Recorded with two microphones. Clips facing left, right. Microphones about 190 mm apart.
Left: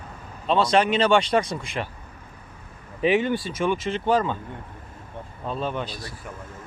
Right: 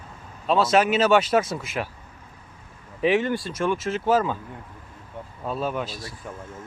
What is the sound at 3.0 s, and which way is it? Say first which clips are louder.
Speech: even; centre (ahead or behind).